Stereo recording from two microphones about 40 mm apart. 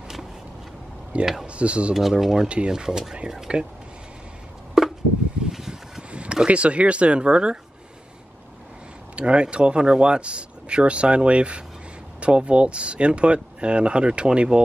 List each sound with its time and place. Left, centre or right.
1.4 s speech: right
2.0 s speech: centre
2.4 s speech: right
2.7 s speech: centre
4.8 s chop: centre
5.5 s a sound: centre
6.1 s speech: right
9.1 s speech: right